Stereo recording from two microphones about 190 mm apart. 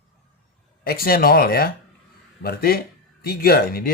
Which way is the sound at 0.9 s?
50° left (ahead or behind).